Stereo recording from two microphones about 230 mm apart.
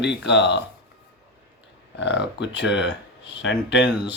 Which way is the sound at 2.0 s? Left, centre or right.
Left.